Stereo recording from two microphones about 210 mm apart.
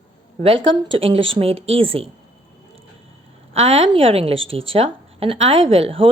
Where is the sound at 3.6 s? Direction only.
30° right (ahead or behind).